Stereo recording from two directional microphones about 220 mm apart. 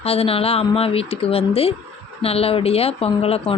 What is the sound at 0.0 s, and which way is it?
Speech, 25° left (ahead or behind).